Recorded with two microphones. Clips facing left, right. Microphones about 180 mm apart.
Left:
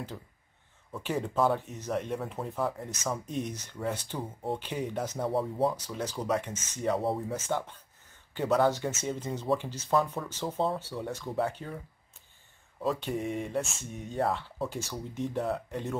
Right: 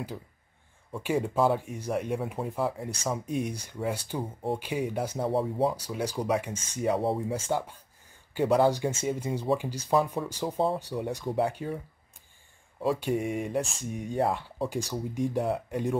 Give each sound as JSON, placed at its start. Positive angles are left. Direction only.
{"t": 0.9, "sound": "speech", "side_deg": -10}
{"t": 12.8, "sound": "speech", "side_deg": -10}